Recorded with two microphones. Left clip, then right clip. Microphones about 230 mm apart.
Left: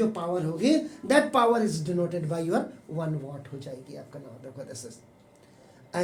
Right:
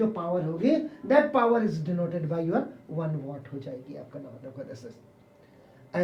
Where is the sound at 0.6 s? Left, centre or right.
Left.